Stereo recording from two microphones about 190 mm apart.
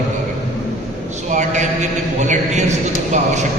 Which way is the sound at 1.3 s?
40° right (ahead or behind).